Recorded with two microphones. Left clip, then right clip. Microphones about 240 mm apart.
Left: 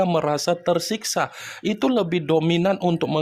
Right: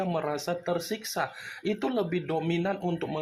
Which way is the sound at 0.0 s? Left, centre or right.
Left.